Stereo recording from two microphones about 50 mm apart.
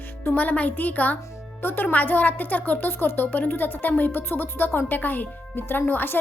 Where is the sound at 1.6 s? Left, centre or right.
Left.